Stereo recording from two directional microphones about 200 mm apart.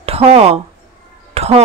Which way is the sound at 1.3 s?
30° right (ahead or behind).